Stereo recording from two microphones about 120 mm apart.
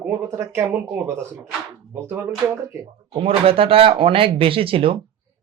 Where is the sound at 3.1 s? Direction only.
50° right (ahead or behind).